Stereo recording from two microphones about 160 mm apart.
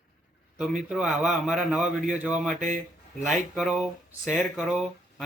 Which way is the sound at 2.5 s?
50° right (ahead or behind).